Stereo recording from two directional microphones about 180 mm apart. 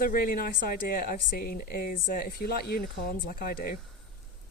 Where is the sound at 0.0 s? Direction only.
50° left (ahead or behind).